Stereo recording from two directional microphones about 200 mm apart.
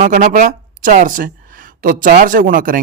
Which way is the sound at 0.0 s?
40° right (ahead or behind).